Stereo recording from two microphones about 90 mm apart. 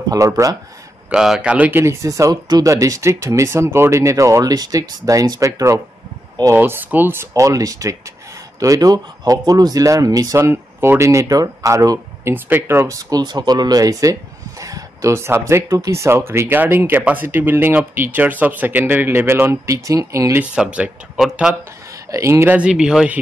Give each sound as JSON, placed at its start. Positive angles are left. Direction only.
{"t": 0.1, "sound": "speech", "side_deg": -40}
{"t": 1.1, "sound": "speech", "side_deg": -5}
{"t": 1.8, "sound": "speech", "side_deg": -30}
{"t": 6.5, "sound": "speech", "side_deg": -20}
{"t": 7.3, "sound": "speech", "side_deg": -40}
{"t": 12.4, "sound": "speech", "side_deg": -20}
{"t": 13.2, "sound": "speech", "side_deg": -50}
{"t": 20.5, "sound": "speech", "side_deg": -10}
{"t": 22.1, "sound": "speech", "side_deg": -30}
{"t": 22.6, "sound": "speech", "side_deg": -10}